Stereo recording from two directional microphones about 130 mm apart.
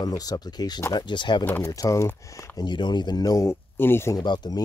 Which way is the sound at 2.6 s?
35° left (ahead or behind).